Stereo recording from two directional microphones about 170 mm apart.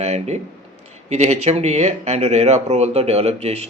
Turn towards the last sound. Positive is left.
turn(degrees=-40)  # may be behind; listen again after turning